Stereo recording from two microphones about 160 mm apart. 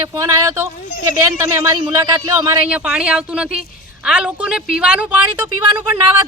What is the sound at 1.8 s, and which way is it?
Speech, 20° right (ahead or behind).